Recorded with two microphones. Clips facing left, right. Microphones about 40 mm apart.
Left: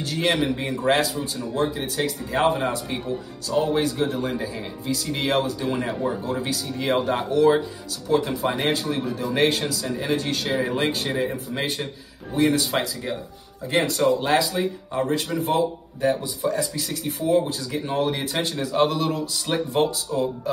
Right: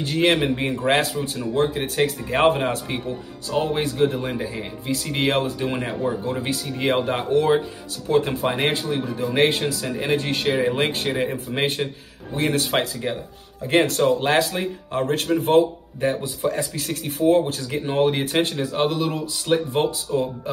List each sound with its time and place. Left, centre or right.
0.0 s speech: right
3.4 s speech: right
4.2 s speech: right
8.1 s speech: right
16.0 s speech: right
18.6 s a man's voice: centre
19.4 s speech: right